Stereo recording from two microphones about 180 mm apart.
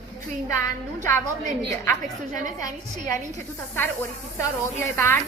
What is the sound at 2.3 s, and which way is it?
Speech, 45° right (ahead or behind).